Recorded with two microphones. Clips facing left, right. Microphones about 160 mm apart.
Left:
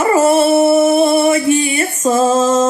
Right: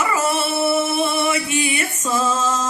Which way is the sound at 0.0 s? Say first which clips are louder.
Left 10 dB; 30° left (ahead or behind).